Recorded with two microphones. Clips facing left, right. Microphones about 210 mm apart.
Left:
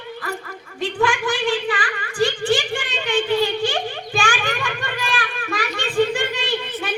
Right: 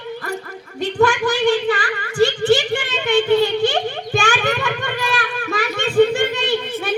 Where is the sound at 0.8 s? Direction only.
40° right (ahead or behind).